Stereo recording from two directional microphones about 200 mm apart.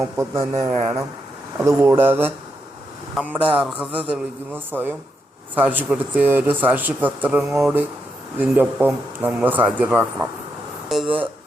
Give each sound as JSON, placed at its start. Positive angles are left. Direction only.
{"t": 0.0, "sound": "a man's voice", "side_deg": -15}
{"t": 0.7, "sound": "speech", "side_deg": -30}
{"t": 1.6, "sound": "a man's voice", "side_deg": -15}